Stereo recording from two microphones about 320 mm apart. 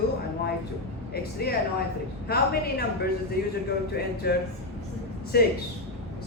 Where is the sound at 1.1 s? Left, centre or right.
Left.